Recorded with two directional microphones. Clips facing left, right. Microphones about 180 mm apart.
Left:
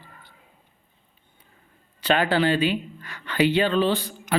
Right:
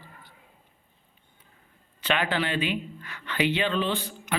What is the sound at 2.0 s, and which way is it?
Speech, 35° left (ahead or behind).